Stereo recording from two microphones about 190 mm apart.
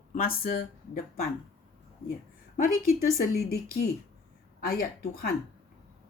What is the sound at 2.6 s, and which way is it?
Speech, 50° left (ahead or behind).